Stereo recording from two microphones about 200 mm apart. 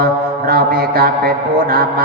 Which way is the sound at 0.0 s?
45° right (ahead or behind).